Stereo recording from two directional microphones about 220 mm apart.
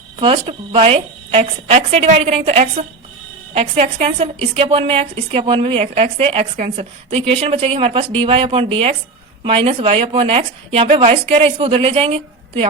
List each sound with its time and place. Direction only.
0.2 s a woman's voice: 25° right (ahead or behind)